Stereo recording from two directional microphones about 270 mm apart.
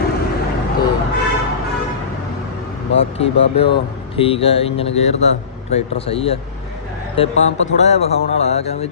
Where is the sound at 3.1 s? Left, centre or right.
Left.